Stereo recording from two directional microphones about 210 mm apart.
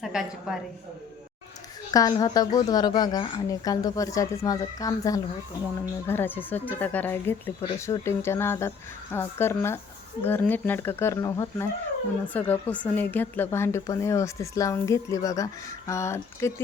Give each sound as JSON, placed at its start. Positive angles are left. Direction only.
{"t": 0.0, "sound": "a woman's voice", "side_deg": 0}
{"t": 1.9, "sound": "speech", "side_deg": 15}